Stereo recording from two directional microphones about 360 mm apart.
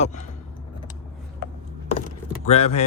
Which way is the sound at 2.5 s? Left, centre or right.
Centre.